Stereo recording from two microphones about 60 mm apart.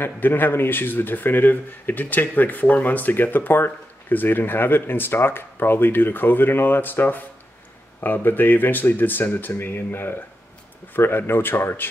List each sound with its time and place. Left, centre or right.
0.0 s speech: left